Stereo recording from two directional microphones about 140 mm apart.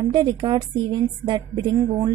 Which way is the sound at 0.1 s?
35° right (ahead or behind).